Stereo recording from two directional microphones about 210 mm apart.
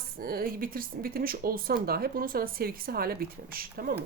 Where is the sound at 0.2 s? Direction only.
45° right (ahead or behind).